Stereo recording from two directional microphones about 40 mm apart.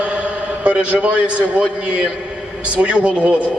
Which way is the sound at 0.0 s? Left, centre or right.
Right.